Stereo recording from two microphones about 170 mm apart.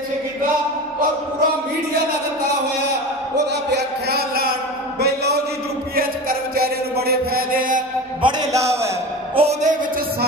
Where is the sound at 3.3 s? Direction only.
80° right; by 4.5 s 65° right (ahead or behind).